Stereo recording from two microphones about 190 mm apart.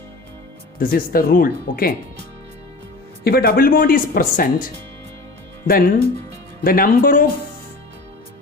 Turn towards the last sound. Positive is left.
turn(degrees=50)  # may be behind; listen again after turning